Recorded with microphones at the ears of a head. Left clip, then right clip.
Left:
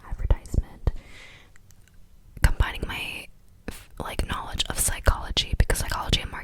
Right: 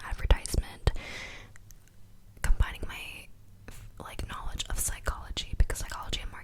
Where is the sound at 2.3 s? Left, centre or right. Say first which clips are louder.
Left 8 dB; left.